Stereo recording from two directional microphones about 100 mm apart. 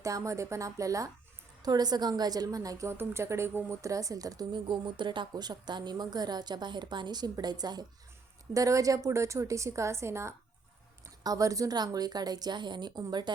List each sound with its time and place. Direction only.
0.0 s a woman's voice: 30° right (ahead or behind)